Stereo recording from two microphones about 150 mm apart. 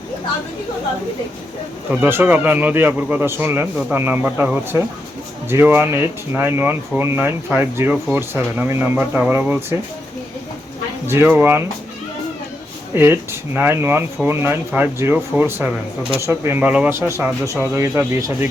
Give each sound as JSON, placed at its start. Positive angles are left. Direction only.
{"t": 1.9, "sound": "speech", "side_deg": -15}
{"t": 11.1, "sound": "speech", "side_deg": -10}
{"t": 12.9, "sound": "speech", "side_deg": -15}